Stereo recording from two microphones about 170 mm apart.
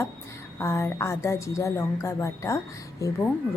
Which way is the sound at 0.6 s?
15° left (ahead or behind).